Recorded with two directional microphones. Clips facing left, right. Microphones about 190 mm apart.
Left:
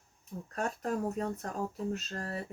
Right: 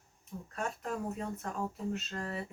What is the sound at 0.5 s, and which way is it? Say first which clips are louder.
Speech: left 4 dB; 40° left (ahead or behind).